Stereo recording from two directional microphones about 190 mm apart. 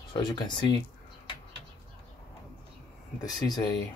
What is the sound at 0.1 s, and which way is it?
Speech, 25° left (ahead or behind).